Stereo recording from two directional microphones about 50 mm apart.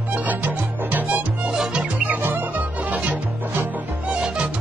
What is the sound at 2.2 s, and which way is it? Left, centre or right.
Music, right.